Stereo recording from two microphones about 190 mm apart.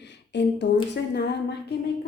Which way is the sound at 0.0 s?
65° left (ahead or behind).